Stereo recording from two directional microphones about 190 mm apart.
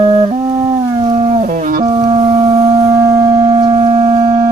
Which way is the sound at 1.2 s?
35° right (ahead or behind).